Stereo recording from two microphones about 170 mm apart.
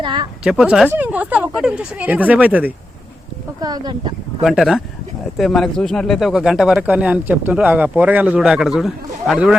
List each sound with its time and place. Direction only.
0.0 s speech: 30° right (ahead or behind)
0.4 s speech: 5° right (ahead or behind)
3.6 s speech: 25° right (ahead or behind)
4.4 s speech: centre (ahead or behind)